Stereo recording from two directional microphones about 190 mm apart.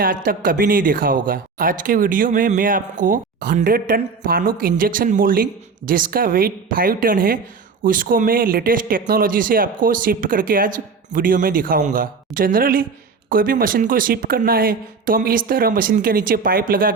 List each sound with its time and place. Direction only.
0.0 s speech: 50° right (ahead or behind)